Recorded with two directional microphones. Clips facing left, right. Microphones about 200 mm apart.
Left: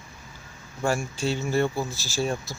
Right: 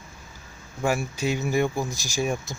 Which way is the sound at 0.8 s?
10° right (ahead or behind).